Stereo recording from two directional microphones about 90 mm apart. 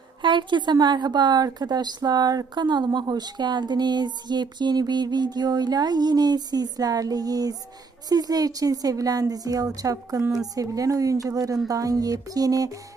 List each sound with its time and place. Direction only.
0.2 s a woman's voice: 60° right (ahead or behind); by 12.7 s 40° right (ahead or behind)